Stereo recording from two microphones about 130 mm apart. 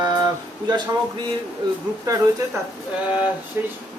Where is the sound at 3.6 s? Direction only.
15° right (ahead or behind).